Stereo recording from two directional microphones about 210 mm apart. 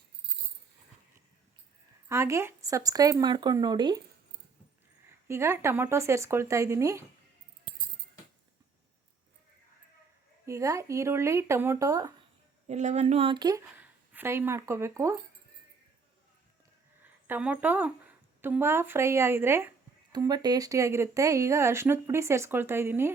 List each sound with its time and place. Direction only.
2.0 s speech: 15° right (ahead or behind)
5.3 s speech: 10° right (ahead or behind)
10.4 s speech: 15° right (ahead or behind)
12.6 s speech: 35° right (ahead or behind); by 15.2 s 15° right (ahead or behind)
17.0 s speech: 10° right (ahead or behind)